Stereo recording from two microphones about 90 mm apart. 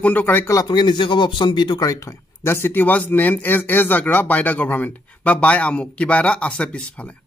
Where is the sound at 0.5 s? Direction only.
45° left (ahead or behind).